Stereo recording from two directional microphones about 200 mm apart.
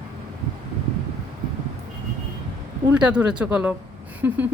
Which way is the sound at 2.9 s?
5° right (ahead or behind).